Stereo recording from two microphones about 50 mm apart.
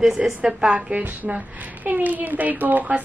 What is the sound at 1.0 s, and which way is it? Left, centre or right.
A woman's voice, right.